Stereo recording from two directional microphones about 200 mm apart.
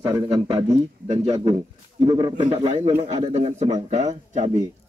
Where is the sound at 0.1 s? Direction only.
15° right (ahead or behind).